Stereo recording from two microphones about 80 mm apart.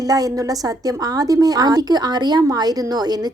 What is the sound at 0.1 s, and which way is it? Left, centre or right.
A woman's voice, right.